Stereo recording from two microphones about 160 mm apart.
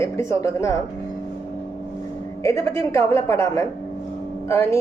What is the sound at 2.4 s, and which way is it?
A woman's voice, 20° left (ahead or behind).